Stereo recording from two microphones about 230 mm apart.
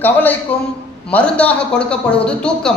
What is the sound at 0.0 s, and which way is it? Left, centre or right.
A man's voice, centre.